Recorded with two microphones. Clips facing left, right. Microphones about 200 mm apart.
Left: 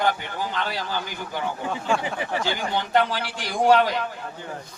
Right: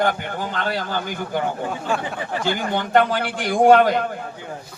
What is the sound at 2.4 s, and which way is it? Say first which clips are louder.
A man's voice: right 3 dB; 50° right (ahead or behind).